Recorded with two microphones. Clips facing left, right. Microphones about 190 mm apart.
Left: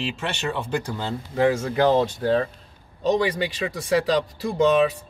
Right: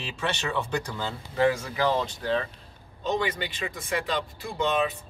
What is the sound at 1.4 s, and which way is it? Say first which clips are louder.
Speech: left 4 dB; 50° left (ahead or behind).